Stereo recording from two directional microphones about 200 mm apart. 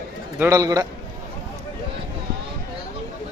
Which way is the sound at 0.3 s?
15° right (ahead or behind).